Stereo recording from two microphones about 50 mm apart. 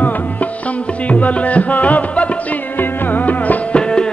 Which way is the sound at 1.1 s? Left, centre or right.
Left.